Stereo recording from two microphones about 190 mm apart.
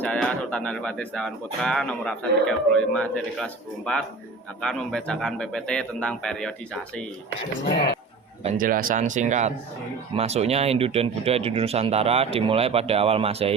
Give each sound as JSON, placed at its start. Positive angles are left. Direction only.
{"t": 0.0, "sound": "speech", "side_deg": 5}
{"t": 8.4, "sound": "speech", "side_deg": -45}